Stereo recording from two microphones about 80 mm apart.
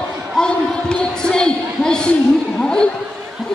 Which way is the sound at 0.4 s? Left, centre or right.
Centre.